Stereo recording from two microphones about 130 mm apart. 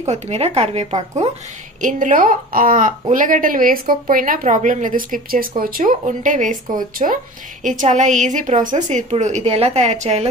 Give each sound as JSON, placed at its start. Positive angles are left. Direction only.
{"t": 0.0, "sound": "speech", "side_deg": -55}
{"t": 1.8, "sound": "a woman's voice", "side_deg": -85}
{"t": 7.6, "sound": "a woman's voice", "side_deg": -75}
{"t": 9.1, "sound": "a woman's voice", "side_deg": -60}